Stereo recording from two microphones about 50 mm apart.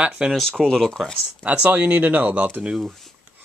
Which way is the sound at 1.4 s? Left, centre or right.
Right.